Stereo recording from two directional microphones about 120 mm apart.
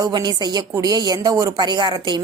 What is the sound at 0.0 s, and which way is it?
Speech, 35° right (ahead or behind).